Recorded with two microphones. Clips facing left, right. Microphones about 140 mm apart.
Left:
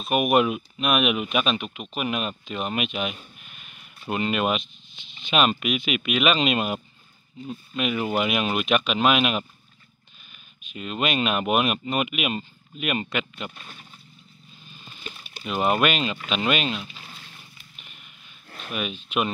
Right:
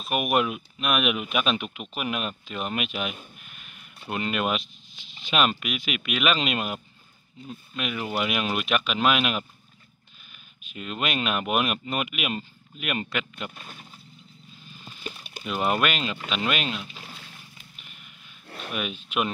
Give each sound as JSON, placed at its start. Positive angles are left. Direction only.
{"t": 0.0, "sound": "speech", "side_deg": 0}
{"t": 10.6, "sound": "speech", "side_deg": 0}
{"t": 15.4, "sound": "speech", "side_deg": 15}
{"t": 15.8, "sound": "speech", "side_deg": 5}
{"t": 18.5, "sound": "speech", "side_deg": -5}